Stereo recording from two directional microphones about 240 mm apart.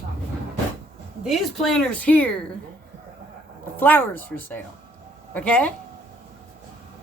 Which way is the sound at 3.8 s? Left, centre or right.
Centre.